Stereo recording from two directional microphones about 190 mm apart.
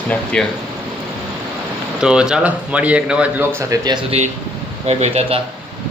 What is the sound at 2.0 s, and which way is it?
A man's voice, 5° right (ahead or behind).